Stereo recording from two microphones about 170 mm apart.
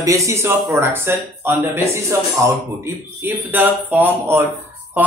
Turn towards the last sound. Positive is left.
turn(degrees=-10)  # may be behind; listen again after turning